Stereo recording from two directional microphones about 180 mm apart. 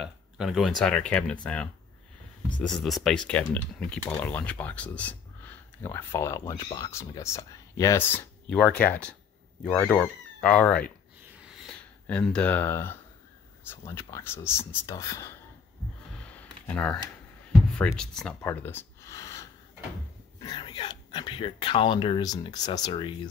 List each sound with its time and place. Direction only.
0.0 s speech: centre (ahead or behind)
11.2 s a sound: 5° right (ahead or behind); by 12.9 s 15° left (ahead or behind)
13.7 s speech: 15° left (ahead or behind)
16.2 s computer keyboard: 10° left (ahead or behind)
17.9 s speech: 5° left (ahead or behind)
18.5 s a sound: 10° left (ahead or behind)
20.3 s speech: 25° left (ahead or behind)